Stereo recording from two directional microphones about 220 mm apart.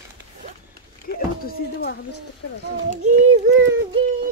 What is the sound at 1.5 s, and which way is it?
Speech, 45° left (ahead or behind).